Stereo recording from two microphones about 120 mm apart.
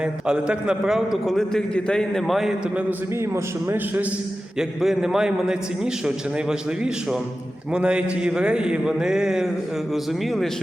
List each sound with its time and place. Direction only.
0.0 s a man's voice: 5° right (ahead or behind)
3.2 s a man's voice: 20° right (ahead or behind)
4.5 s a man's voice: 5° right (ahead or behind)